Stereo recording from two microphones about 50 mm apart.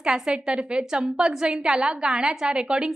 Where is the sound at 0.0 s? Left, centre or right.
Centre.